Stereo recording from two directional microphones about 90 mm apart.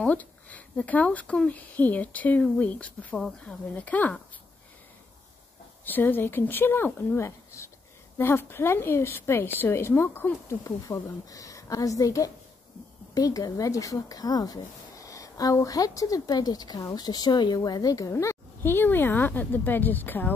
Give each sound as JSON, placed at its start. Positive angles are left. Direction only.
{"t": 0.1, "sound": "speech", "side_deg": 15}
{"t": 5.9, "sound": "a woman's voice", "side_deg": 20}
{"t": 10.6, "sound": "a woman's voice", "side_deg": 35}